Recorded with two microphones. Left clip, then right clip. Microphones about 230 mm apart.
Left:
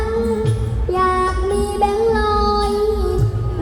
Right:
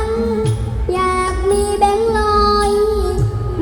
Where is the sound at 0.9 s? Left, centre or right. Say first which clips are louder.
Even; right.